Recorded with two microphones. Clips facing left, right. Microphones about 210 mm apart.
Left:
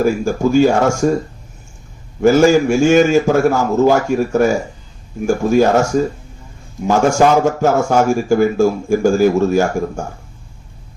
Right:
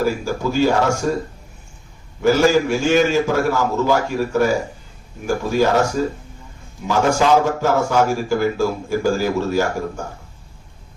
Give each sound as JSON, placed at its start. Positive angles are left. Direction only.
{"t": 0.0, "sound": "speech", "side_deg": 50}
{"t": 2.2, "sound": "speech", "side_deg": 45}
{"t": 6.8, "sound": "speech", "side_deg": 45}